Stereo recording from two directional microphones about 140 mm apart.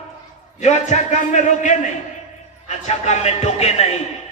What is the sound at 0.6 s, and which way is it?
A man's voice, 55° left (ahead or behind).